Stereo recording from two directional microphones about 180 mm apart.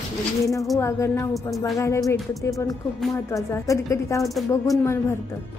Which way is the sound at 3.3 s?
15° left (ahead or behind).